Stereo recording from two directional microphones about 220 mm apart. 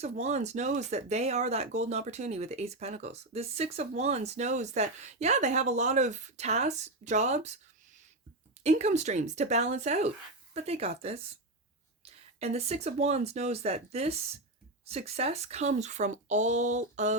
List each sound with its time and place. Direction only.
0.0 s speech: 30° right (ahead or behind)
8.6 s speech: 30° right (ahead or behind)